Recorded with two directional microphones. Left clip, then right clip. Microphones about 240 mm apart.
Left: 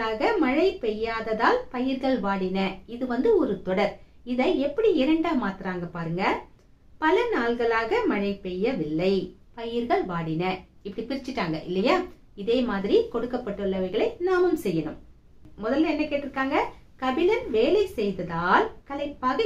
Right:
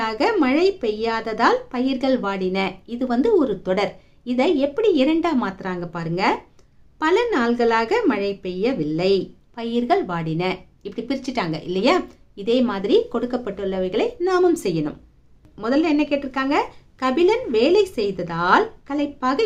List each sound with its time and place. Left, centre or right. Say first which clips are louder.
0.0 s a woman's voice: right 4 dB; right